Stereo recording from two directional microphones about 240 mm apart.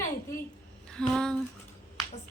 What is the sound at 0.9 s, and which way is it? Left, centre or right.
Speech, centre.